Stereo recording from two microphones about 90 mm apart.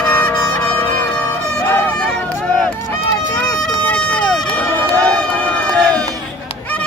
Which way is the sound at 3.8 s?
15° left (ahead or behind).